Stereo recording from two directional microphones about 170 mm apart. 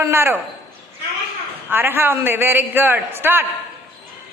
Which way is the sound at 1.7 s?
10° right (ahead or behind).